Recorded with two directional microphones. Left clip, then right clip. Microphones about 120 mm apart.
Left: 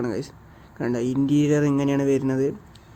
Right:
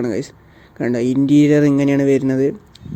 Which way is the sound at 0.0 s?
45° right (ahead or behind).